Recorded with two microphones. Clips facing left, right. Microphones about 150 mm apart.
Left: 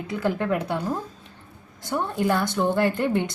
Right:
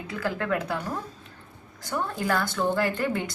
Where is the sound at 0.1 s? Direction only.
20° left (ahead or behind).